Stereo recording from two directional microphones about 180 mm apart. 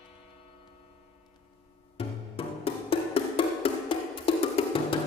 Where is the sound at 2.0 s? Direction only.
30° left (ahead or behind).